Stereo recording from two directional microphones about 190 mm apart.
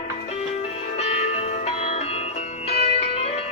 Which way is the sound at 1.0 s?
35° left (ahead or behind).